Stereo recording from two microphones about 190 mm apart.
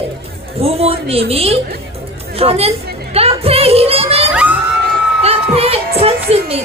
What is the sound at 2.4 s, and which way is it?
Children playing, 30° right (ahead or behind).